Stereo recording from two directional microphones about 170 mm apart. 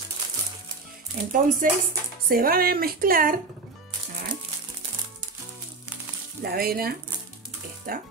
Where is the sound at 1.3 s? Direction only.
50° right (ahead or behind).